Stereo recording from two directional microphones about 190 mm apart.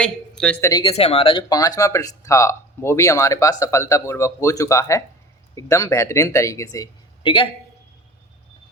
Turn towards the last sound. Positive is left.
turn(degrees=25)  # may be behind; listen again after turning